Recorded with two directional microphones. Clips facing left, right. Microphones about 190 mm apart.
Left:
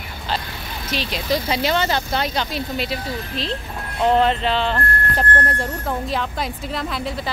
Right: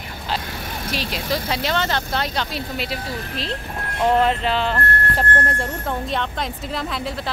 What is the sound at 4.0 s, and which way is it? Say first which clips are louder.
Speech: left 1 dB; 5° right (ahead or behind).